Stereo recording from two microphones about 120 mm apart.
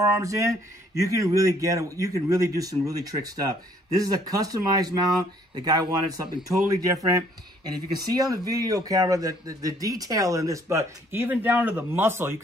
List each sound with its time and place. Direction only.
0.0 s speech: 25° right (ahead or behind)